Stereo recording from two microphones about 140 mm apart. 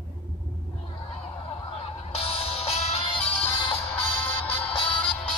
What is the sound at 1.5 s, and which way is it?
Music, 45° left (ahead or behind).